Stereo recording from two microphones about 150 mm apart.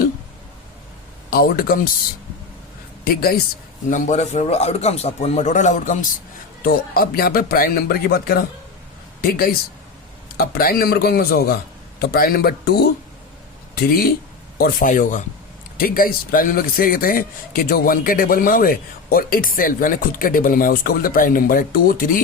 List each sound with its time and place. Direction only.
1.3 s speech: 80° left
3.0 s a man's voice: 90° left
3.8 s a man's voice: 55° left (ahead or behind)
6.6 s speech: 75° left (ahead or behind)
10.3 s a man's voice: 85° left
14.6 s speech: 60° left (ahead or behind)
15.8 s a man's voice: 75° left (ahead or behind)